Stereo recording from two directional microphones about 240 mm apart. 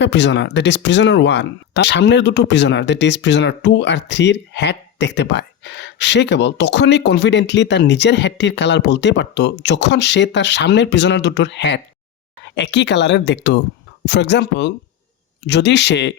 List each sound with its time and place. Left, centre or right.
0.0 s speech: left